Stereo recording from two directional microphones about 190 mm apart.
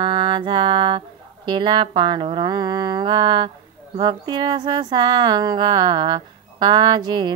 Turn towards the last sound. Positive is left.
turn(degrees=-25)  # may be behind; listen again after turning